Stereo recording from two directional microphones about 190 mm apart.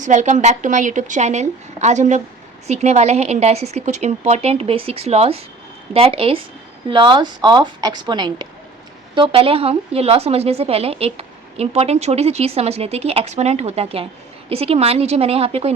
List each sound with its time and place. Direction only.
0.0 s a woman's voice: 40° right (ahead or behind)